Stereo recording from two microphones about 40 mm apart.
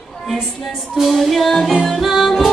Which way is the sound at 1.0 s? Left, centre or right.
Centre.